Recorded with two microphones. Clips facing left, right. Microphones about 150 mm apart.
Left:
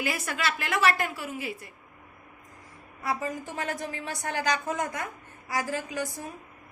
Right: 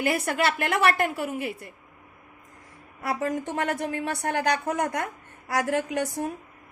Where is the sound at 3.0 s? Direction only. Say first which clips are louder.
Right 4 dB; 65° right (ahead or behind).